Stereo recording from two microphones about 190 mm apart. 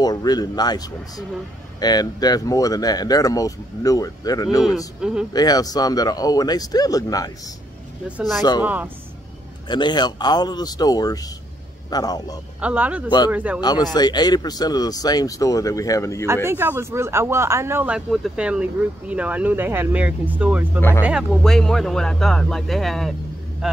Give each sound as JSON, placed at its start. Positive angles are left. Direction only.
{"t": 0.0, "sound": "speech", "side_deg": 20}
{"t": 4.6, "sound": "speech", "side_deg": 0}
{"t": 5.3, "sound": "speech", "side_deg": 20}
{"t": 8.4, "sound": "speech", "side_deg": 20}
{"t": 8.6, "sound": "speech", "side_deg": -10}
{"t": 9.7, "sound": "speech", "side_deg": 25}
{"t": 12.5, "sound": "speech", "side_deg": -5}
{"t": 13.6, "sound": "speech", "side_deg": 20}
{"t": 16.4, "sound": "speech", "side_deg": -10}